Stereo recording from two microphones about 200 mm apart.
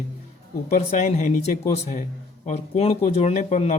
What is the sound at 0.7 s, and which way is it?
A man's voice, 35° left (ahead or behind).